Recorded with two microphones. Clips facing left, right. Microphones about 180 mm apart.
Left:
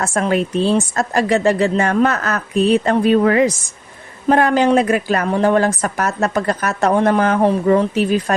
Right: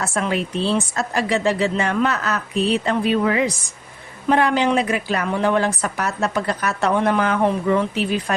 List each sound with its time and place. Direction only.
0.0 s a woman's voice: 45° left (ahead or behind)